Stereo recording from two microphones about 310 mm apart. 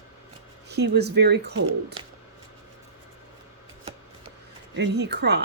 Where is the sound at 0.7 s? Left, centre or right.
Right.